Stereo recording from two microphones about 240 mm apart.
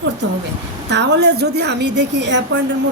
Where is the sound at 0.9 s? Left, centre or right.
Right.